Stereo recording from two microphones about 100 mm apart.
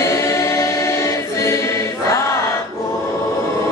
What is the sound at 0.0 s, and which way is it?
Choir, 30° left (ahead or behind).